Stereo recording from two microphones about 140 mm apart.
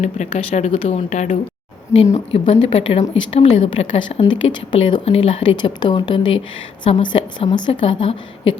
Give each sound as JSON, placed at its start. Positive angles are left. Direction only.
{"t": 0.0, "sound": "speech", "side_deg": 55}
{"t": 1.9, "sound": "a woman's voice", "side_deg": 20}
{"t": 2.5, "sound": "a woman's voice", "side_deg": 45}
{"t": 5.0, "sound": "a woman's voice", "side_deg": 45}